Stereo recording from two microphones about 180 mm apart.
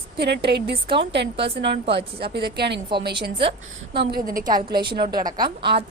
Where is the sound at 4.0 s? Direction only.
55° right (ahead or behind).